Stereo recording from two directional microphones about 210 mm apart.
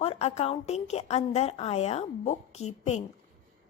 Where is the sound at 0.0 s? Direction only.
30° left (ahead or behind).